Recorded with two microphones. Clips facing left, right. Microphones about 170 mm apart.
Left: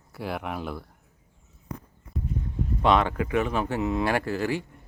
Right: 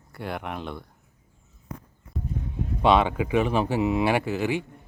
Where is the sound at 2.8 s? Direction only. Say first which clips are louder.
Right 2 dB; 20° right (ahead or behind).